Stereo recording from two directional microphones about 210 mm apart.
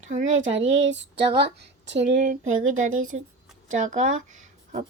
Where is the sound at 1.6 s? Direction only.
55° right (ahead or behind).